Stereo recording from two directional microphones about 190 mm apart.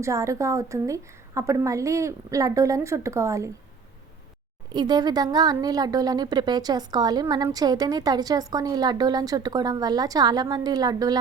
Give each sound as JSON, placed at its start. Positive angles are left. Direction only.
{"t": 0.0, "sound": "a woman's voice", "side_deg": -15}
{"t": 4.7, "sound": "a woman's voice", "side_deg": -20}